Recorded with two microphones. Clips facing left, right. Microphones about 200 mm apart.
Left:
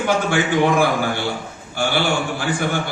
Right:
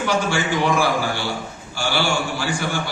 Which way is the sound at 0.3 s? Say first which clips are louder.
Left 3 dB; 55° left (ahead or behind).